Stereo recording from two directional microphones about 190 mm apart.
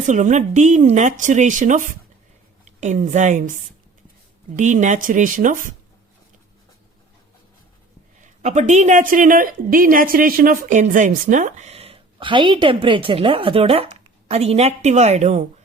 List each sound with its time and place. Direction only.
0.1 s a woman's voice: 40° right (ahead or behind)
4.5 s a woman's voice: 40° right (ahead or behind)
8.2 s a woman's voice: 40° right (ahead or behind)